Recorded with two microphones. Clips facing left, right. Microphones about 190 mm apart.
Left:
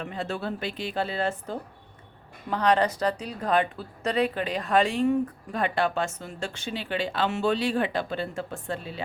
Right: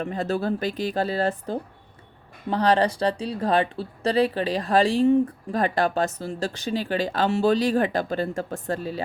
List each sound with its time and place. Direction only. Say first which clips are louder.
0.0 s speech: right 6 dB; 40° right (ahead or behind)